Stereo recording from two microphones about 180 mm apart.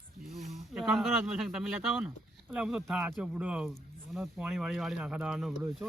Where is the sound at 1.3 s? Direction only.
5° right (ahead or behind).